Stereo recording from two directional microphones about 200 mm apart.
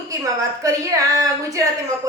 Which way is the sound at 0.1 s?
15° right (ahead or behind).